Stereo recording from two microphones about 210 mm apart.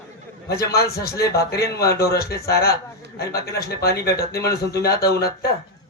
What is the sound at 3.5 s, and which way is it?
Speech, 50° left (ahead or behind).